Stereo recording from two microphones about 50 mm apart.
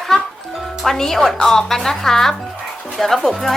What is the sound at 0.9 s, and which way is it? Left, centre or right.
Speech, centre.